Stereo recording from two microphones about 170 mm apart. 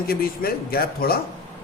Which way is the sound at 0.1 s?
60° left (ahead or behind).